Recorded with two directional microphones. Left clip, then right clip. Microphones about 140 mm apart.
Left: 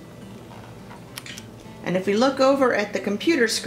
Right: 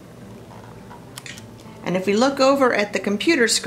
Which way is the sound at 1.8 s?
20° right (ahead or behind).